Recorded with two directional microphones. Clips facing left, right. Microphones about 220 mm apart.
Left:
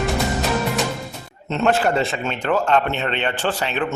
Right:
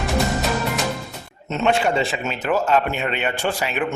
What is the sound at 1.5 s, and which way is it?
Speech, centre (ahead or behind).